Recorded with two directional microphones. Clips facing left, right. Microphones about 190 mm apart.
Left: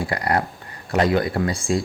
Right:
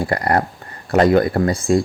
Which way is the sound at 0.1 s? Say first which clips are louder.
Right 4 dB; 50° right (ahead or behind).